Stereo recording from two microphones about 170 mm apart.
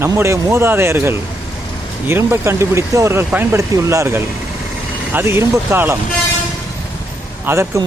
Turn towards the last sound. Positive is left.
turn(degrees=-15)  # may be behind; listen again after turning